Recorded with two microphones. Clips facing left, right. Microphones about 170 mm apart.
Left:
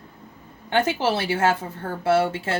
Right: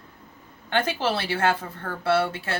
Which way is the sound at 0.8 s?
25° left (ahead or behind).